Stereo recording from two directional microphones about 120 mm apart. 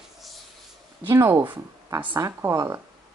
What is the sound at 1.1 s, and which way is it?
Speech, 25° right (ahead or behind).